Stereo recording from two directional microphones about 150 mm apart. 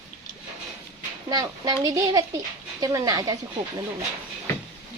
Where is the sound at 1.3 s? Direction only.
25° right (ahead or behind).